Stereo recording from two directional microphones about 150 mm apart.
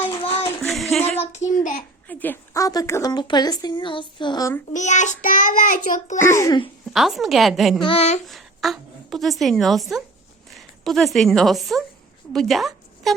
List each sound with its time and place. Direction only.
0.2 s child singing: 40° left (ahead or behind)
0.6 s female singing: centre (ahead or behind)
2.0 s a woman's voice: 10° left (ahead or behind); by 4.4 s 30° left (ahead or behind)
4.7 s child singing: 55° left (ahead or behind)
6.1 s a child's voice: 15° left (ahead or behind)
6.9 s a woman's voice: centre (ahead or behind)
7.8 s speech: 40° left (ahead or behind)
8.3 s a woman's voice: centre (ahead or behind)